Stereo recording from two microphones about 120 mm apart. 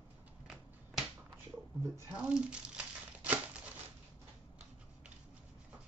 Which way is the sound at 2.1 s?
10° right (ahead or behind).